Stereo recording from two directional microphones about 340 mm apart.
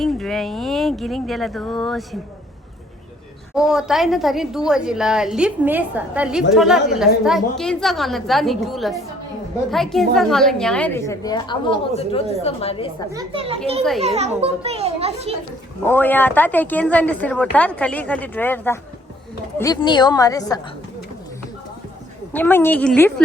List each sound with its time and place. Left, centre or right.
0.0 s speech: centre
3.5 s a woman's voice: centre
13.1 s a child's voice: centre
15.8 s a woman's voice: centre
22.3 s speech: centre